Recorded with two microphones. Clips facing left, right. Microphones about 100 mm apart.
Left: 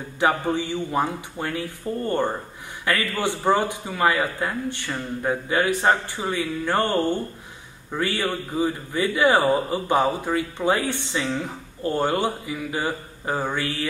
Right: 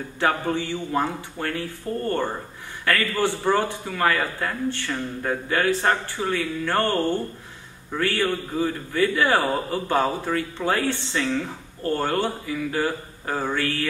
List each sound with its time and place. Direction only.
0.2 s a man's voice: 15° left (ahead or behind)